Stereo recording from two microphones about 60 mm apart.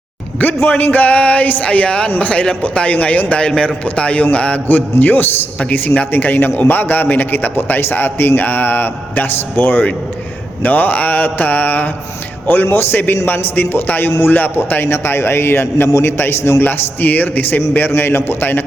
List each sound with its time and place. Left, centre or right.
0.9 s a man's voice: left